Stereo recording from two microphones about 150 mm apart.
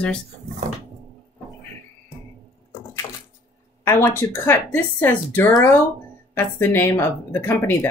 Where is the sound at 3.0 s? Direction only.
25° left (ahead or behind).